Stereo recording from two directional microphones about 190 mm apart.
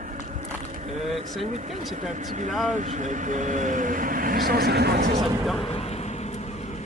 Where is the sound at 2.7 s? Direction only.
40° right (ahead or behind); by 5.0 s 55° right (ahead or behind).